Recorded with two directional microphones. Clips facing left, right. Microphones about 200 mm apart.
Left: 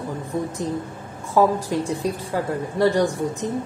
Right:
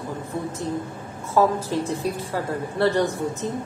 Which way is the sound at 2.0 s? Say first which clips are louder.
Left 2 dB; 15° left (ahead or behind).